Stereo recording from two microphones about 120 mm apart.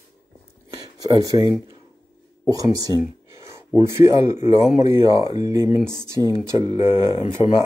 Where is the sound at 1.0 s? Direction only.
30° right (ahead or behind).